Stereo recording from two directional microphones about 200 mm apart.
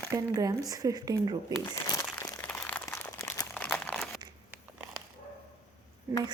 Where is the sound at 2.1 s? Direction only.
10° left (ahead or behind).